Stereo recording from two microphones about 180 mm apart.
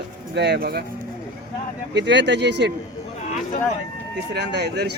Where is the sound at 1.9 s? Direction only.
75° right (ahead or behind).